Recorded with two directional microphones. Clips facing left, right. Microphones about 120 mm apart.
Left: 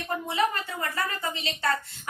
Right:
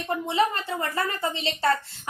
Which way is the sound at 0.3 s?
30° right (ahead or behind).